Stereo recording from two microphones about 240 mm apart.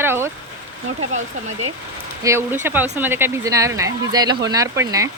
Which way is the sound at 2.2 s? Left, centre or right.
Centre.